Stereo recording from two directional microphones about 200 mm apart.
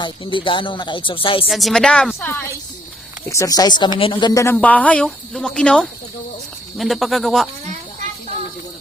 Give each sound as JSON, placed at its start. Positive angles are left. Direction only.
{"t": 0.0, "sound": "speech", "side_deg": 25}
{"t": 1.5, "sound": "a woman's voice", "side_deg": 0}